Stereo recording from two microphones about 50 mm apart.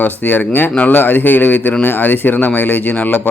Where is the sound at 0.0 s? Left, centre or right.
Left.